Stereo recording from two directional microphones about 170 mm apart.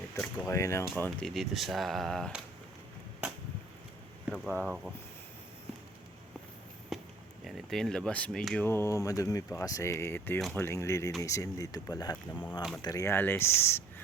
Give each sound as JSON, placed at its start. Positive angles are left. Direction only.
{"t": 0.2, "sound": "speech", "side_deg": 15}
{"t": 1.3, "sound": "speech", "side_deg": 0}
{"t": 4.3, "sound": "speech", "side_deg": -5}
{"t": 6.9, "sound": "a sound", "side_deg": 0}
{"t": 7.4, "sound": "speech", "side_deg": 0}